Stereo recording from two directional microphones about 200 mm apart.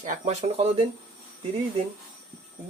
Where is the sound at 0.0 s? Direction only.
30° right (ahead or behind).